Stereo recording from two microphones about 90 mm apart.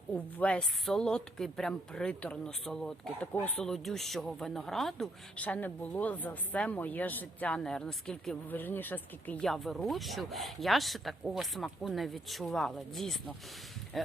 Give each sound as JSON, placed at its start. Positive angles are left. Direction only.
{"t": 0.1, "sound": "a woman's voice", "side_deg": 15}
{"t": 5.4, "sound": "a woman's voice", "side_deg": 20}
{"t": 8.4, "sound": "speech", "side_deg": 20}
{"t": 9.4, "sound": "speech", "side_deg": 5}
{"t": 13.9, "sound": "music", "side_deg": 0}